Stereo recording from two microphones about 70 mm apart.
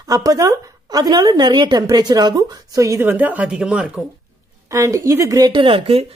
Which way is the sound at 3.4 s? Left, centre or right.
Centre.